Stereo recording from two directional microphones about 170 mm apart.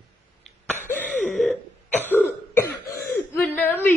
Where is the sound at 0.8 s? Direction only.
10° left (ahead or behind).